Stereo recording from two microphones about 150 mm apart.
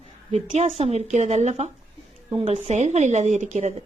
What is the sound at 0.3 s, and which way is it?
A woman's voice, 45° right (ahead or behind).